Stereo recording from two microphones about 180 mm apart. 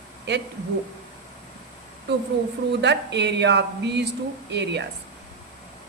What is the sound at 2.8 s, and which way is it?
A woman's voice, 70° right (ahead or behind).